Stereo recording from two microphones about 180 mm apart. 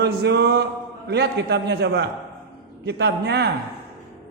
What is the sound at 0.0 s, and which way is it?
A man's voice, 65° right (ahead or behind).